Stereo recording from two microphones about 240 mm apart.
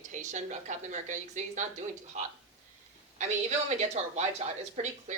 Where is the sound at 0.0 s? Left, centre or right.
Right.